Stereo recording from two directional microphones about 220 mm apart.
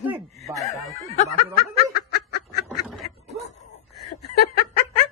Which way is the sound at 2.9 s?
Centre (ahead or behind).